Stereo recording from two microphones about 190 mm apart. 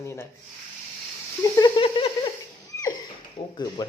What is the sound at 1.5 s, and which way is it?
Speech, 25° left (ahead or behind).